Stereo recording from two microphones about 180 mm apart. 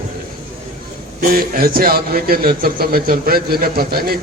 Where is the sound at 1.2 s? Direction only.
55° right (ahead or behind).